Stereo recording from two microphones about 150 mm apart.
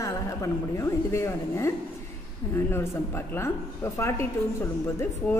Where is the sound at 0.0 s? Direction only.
20° left (ahead or behind).